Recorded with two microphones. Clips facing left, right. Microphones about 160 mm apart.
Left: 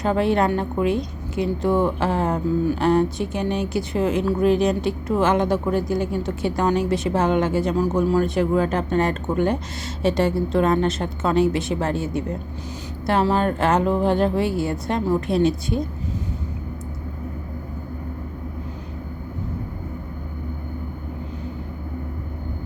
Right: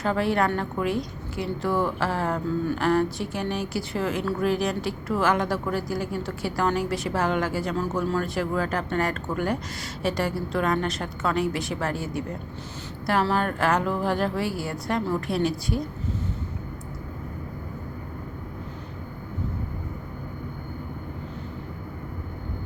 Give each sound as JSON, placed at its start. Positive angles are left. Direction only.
{"t": 0.0, "sound": "a woman's voice", "side_deg": 20}